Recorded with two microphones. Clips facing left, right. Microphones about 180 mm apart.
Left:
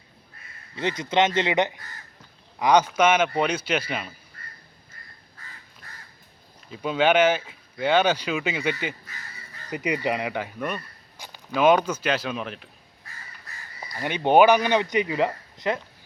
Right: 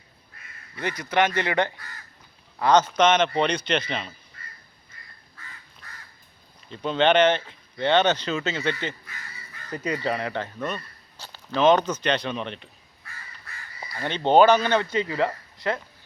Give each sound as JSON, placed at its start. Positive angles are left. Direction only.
{"t": 0.8, "sound": "speech", "side_deg": 25}
{"t": 6.7, "sound": "speech", "side_deg": 10}
{"t": 13.9, "sound": "speech", "side_deg": 10}